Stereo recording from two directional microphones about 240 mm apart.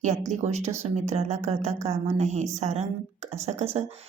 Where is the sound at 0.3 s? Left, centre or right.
Right.